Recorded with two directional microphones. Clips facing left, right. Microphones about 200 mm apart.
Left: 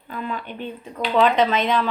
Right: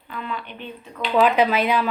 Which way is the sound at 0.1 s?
45° left (ahead or behind).